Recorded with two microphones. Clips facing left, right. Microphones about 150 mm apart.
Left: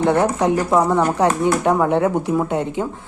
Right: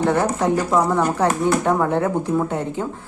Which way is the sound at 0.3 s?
15° left (ahead or behind).